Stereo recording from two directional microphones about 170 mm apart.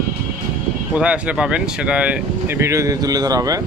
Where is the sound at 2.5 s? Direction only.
15° right (ahead or behind).